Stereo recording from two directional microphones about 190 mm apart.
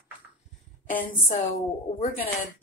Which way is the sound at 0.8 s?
45° left (ahead or behind).